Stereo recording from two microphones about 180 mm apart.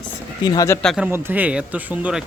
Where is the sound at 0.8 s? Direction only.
5° left (ahead or behind).